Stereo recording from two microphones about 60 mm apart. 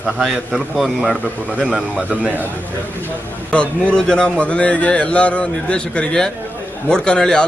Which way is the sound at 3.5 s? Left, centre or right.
Centre.